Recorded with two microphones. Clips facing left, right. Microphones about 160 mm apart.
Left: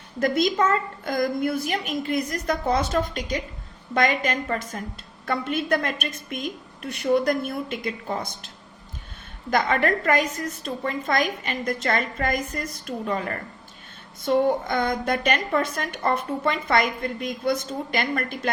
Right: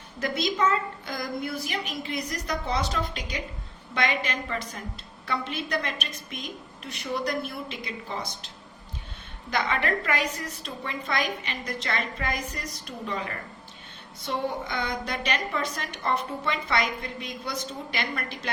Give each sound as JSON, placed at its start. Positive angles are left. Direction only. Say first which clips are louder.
{"t": 0.2, "sound": "a woman's voice", "louder": "left 5 dB", "side_deg": 50}
{"t": 9.5, "sound": "a woman's voice", "louder": "left 5 dB", "side_deg": 45}